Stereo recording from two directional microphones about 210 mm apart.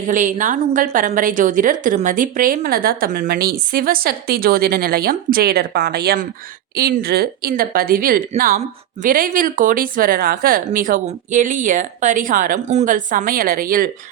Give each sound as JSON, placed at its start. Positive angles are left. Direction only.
{"t": 0.1, "sound": "a woman's voice", "side_deg": -35}